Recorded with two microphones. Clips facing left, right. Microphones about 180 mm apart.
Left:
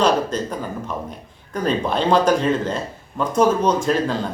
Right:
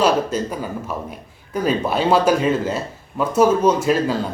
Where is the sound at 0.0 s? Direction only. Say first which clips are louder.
Right 1 dB; 10° right (ahead or behind).